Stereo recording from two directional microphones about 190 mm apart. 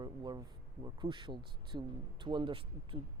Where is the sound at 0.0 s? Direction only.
20° right (ahead or behind).